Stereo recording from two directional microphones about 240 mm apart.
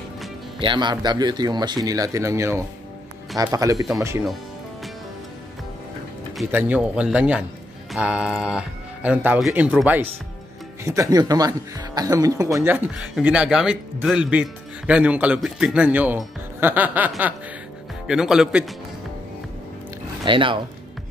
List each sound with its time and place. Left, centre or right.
0.6 s speech: centre
6.3 s speech: centre
20.2 s speech: right